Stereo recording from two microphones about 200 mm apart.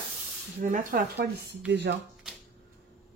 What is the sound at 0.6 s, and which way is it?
Speech, 45° right (ahead or behind).